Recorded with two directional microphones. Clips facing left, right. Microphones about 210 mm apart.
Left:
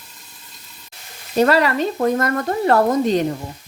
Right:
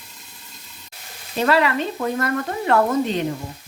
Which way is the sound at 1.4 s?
40° left (ahead or behind).